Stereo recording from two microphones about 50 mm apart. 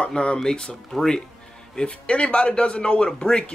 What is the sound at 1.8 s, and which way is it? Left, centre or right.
Speech, left.